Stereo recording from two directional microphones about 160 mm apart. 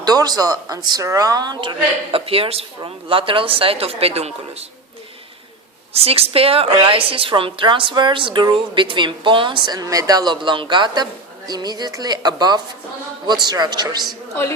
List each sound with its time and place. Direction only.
0.0 s a man's voice: 25° right (ahead or behind)
2.1 s a woman's voice: 35° right (ahead or behind)
5.9 s a woman's voice: 40° right (ahead or behind)